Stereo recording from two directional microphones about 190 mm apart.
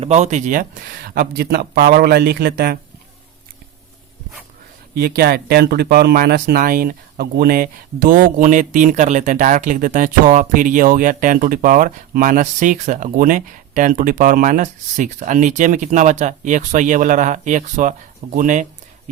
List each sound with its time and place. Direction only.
0.0 s speech: 35° right (ahead or behind); by 2.7 s 55° right (ahead or behind)
4.9 s speech: 55° right (ahead or behind)